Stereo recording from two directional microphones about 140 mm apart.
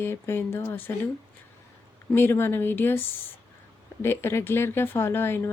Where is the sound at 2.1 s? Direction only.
15° left (ahead or behind).